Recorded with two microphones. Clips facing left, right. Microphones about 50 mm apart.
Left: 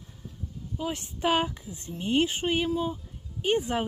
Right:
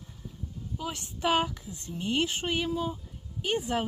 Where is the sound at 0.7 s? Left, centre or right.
Centre.